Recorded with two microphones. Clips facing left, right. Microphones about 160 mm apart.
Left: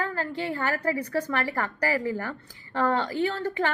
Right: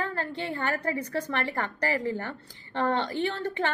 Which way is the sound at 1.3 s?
25° right (ahead or behind).